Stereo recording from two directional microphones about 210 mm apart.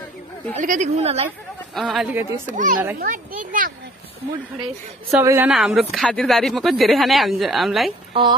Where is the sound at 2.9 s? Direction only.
40° right (ahead or behind).